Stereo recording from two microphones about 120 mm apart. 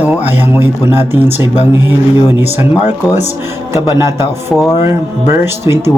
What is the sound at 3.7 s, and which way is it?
Speech, 25° right (ahead or behind).